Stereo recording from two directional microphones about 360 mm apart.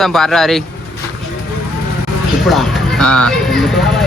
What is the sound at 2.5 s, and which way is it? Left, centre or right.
Speech, centre.